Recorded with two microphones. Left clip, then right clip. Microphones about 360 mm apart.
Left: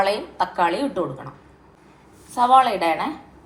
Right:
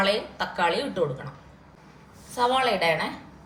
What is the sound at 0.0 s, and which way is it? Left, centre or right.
A woman's voice, centre.